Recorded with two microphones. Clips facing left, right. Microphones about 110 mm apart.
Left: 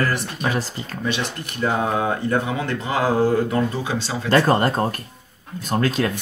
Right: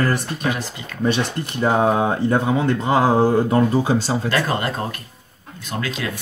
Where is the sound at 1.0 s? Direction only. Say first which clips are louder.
Right 6 dB; 40° right (ahead or behind).